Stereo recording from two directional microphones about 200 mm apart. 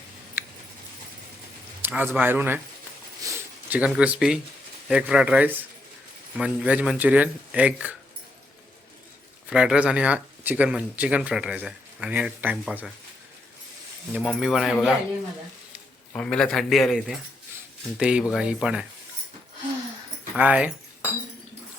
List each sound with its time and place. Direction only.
1.8 s speech: 10° right (ahead or behind)
3.2 s a sound: 10° right (ahead or behind)
4.9 s speech: 5° right (ahead or behind)
9.5 s speech: 5° right (ahead or behind)
14.1 s speech: centre (ahead or behind)
16.1 s speech: 5° left (ahead or behind)
20.3 s speech: 5° right (ahead or behind)